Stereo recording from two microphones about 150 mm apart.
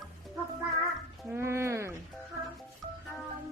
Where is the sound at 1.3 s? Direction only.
15° right (ahead or behind).